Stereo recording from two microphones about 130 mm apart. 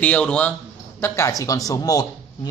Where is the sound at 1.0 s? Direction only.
25° left (ahead or behind).